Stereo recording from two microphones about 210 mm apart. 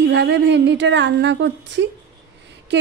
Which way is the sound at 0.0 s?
55° right (ahead or behind).